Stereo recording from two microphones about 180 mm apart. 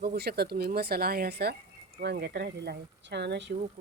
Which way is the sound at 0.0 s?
60° right (ahead or behind).